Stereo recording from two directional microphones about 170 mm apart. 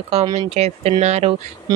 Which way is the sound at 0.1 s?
40° right (ahead or behind).